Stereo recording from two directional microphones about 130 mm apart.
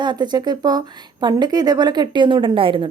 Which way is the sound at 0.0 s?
35° right (ahead or behind).